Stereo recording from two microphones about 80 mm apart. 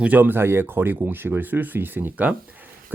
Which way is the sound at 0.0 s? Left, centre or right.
Right.